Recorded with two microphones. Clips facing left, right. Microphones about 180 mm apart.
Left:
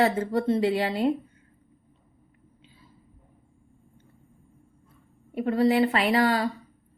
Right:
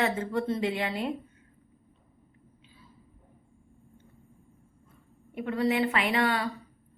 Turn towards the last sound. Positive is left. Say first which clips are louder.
# left 5 dB
turn(degrees=30)  # may be behind; listen again after turning